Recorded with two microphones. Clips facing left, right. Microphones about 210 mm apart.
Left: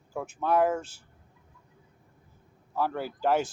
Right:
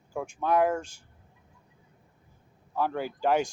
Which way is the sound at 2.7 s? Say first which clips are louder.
Right 1 dB; 5° left (ahead or behind).